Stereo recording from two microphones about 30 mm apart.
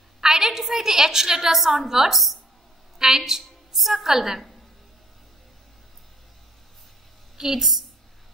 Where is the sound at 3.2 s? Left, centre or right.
Centre.